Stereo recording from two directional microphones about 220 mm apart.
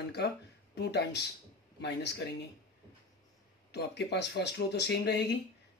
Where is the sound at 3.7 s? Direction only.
50° left (ahead or behind).